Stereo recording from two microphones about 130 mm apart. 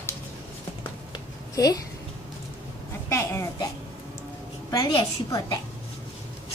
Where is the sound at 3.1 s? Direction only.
20° left (ahead or behind).